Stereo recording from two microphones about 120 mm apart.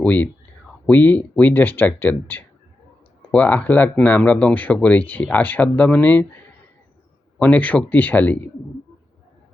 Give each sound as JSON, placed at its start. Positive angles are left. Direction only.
{"t": 0.0, "sound": "speech", "side_deg": 15}
{"t": 7.3, "sound": "speech", "side_deg": 10}